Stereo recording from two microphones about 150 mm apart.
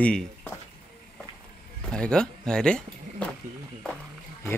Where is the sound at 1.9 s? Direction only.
5° left (ahead or behind).